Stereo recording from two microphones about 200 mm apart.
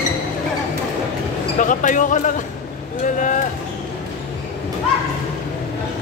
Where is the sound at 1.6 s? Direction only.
40° left (ahead or behind).